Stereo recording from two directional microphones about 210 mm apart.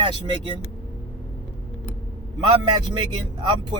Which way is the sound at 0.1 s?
25° right (ahead or behind).